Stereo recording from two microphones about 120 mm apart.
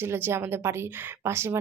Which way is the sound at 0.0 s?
20° right (ahead or behind).